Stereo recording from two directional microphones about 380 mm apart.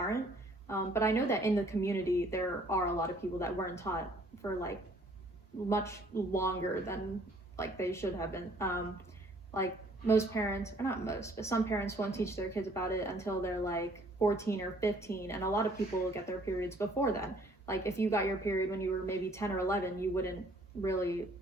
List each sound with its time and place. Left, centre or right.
0.7 s a woman's voice: centre
5.6 s a woman's voice: centre